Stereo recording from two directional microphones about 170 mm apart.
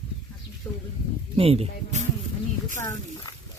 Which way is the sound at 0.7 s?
20° left (ahead or behind).